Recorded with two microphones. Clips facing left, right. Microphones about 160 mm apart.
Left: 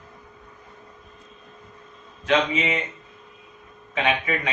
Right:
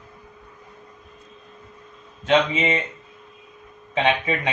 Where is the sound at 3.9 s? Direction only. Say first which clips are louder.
Right 3 dB; 30° right (ahead or behind).